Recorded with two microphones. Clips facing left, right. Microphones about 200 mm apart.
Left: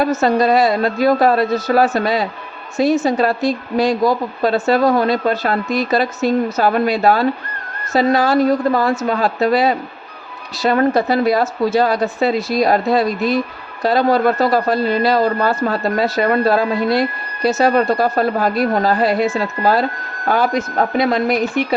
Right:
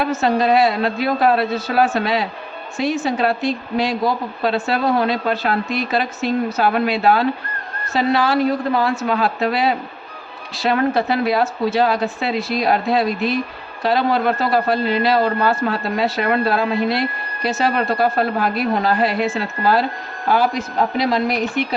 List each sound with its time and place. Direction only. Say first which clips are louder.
0.0 s speech: left 3 dB; 40° left (ahead or behind)
20.2 s speech: left 1 dB; 50° left (ahead or behind)